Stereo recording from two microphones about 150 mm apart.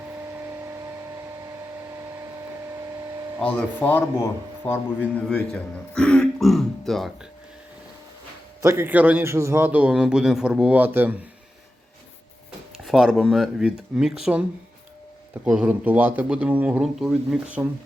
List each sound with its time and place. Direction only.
0.3 s a sound: 15° right (ahead or behind)
3.4 s speech: 10° left (ahead or behind)
5.1 s throat clearing: 5° left (ahead or behind)
8.6 s a man's voice: 15° right (ahead or behind)
12.7 s speech: centre (ahead or behind)
15.4 s a man's voice: 10° right (ahead or behind)